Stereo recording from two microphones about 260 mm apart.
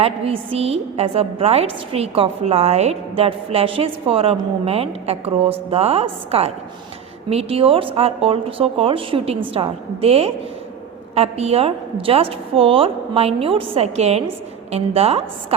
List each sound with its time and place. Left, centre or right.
0.0 s a woman's voice: right